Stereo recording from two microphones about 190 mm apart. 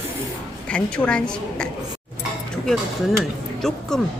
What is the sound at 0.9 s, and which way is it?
Speech, 5° left (ahead or behind).